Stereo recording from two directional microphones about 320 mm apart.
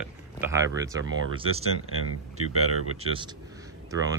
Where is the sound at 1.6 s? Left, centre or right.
Right.